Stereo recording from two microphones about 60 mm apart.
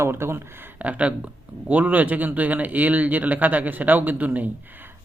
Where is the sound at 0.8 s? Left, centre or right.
Right.